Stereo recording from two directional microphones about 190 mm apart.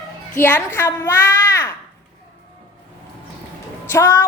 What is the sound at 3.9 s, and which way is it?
Speech, 15° left (ahead or behind).